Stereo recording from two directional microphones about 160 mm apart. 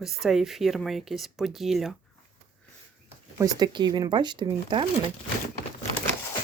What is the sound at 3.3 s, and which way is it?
Speech, 25° right (ahead or behind).